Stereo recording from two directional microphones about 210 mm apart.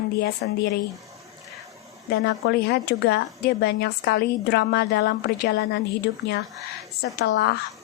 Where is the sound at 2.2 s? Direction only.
50° left (ahead or behind).